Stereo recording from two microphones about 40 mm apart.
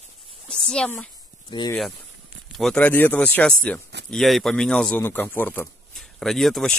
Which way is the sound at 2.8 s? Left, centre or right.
Left.